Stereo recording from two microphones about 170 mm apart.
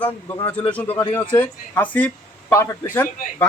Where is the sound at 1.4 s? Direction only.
10° left (ahead or behind).